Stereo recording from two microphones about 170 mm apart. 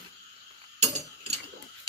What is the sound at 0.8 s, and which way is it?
Cutlery, 40° right (ahead or behind).